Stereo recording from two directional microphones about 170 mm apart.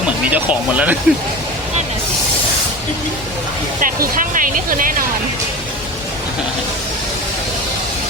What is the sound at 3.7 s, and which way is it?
Speech, 55° right (ahead or behind).